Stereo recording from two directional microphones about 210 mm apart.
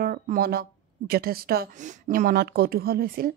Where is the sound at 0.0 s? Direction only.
45° right (ahead or behind).